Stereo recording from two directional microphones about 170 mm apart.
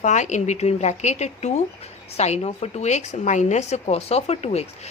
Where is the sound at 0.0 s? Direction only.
45° left (ahead or behind).